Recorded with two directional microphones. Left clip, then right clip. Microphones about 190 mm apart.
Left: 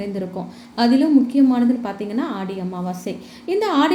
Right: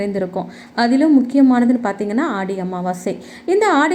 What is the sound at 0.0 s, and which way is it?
A woman's voice, 20° right (ahead or behind).